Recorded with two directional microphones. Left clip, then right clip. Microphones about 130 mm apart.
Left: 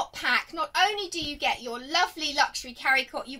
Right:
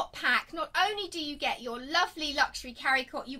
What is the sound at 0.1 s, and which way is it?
A woman's voice, 15° right (ahead or behind).